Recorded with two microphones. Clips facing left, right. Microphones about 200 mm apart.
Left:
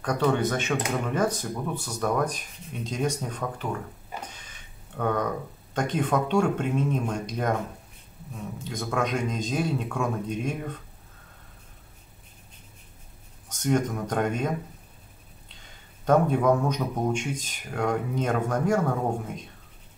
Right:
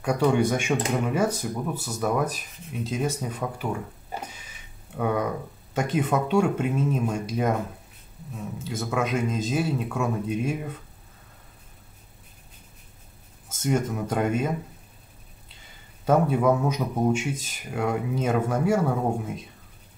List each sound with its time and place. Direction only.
0.0 s speech: 10° right (ahead or behind)
4.3 s a sound: 10° right (ahead or behind)
5.8 s speech: 5° right (ahead or behind)
8.5 s speech: 5° right (ahead or behind)
13.5 s speech: 5° right (ahead or behind)
16.1 s speech: 5° right (ahead or behind)